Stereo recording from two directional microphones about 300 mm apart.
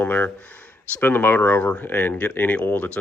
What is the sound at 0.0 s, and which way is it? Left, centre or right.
Speech, centre.